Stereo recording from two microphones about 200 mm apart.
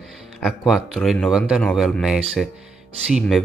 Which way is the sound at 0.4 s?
Centre (ahead or behind).